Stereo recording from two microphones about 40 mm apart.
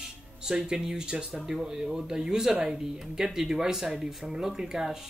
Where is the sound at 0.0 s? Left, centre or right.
Centre.